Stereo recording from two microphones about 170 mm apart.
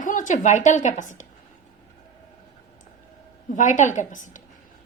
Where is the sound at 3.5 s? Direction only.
50° left (ahead or behind).